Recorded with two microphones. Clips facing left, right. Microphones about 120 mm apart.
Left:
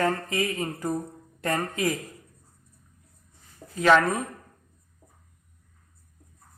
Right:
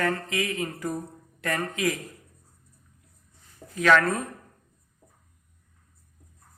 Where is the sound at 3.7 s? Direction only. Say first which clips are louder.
Left 1 dB; 25° left (ahead or behind).